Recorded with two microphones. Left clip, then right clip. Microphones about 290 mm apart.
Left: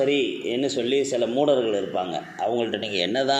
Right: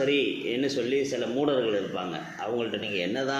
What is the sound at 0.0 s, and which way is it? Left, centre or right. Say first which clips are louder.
Speech: left 3 dB; left.